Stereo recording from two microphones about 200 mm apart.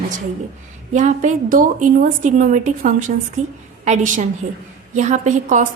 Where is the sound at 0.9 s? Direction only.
35° right (ahead or behind).